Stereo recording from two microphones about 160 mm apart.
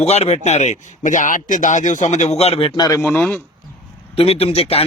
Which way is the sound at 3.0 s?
10° left (ahead or behind).